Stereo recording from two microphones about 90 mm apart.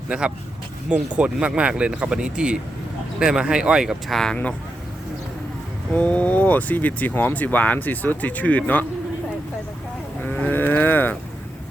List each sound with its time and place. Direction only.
0.1 s speech: 10° right (ahead or behind)
4.1 s speech: 5° left (ahead or behind)
5.9 s speech: 15° left (ahead or behind)
10.2 s livestock: 15° left (ahead or behind)